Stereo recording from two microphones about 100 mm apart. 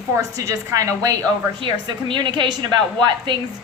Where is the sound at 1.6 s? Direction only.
50° right (ahead or behind).